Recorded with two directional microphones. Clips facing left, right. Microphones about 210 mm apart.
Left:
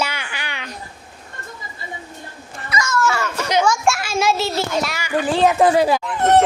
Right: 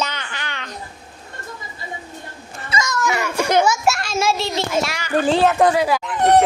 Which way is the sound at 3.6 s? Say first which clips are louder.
Even; 5° right (ahead or behind).